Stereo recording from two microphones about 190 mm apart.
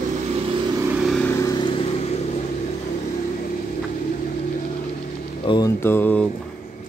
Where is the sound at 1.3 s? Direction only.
20° left (ahead or behind).